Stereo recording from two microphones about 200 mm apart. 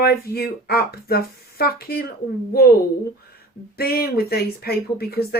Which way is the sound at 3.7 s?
50° left (ahead or behind).